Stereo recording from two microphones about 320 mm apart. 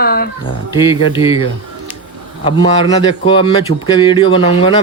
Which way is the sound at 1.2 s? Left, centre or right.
Centre.